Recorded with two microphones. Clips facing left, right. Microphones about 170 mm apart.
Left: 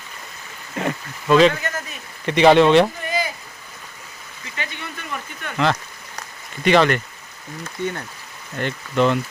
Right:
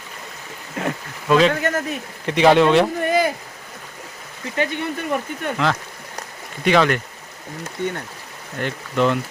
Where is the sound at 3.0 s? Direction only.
55° right (ahead or behind).